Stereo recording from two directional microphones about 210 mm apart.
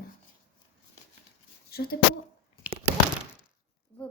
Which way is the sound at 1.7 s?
50° left (ahead or behind).